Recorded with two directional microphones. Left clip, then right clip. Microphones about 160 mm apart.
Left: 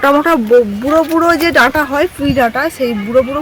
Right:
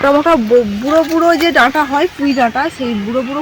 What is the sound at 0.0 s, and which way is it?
Speech, 20° left (ahead or behind).